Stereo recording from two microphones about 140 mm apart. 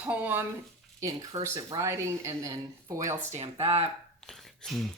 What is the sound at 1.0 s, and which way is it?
Speech, 25° right (ahead or behind).